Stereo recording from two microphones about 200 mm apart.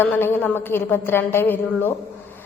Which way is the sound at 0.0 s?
10° left (ahead or behind).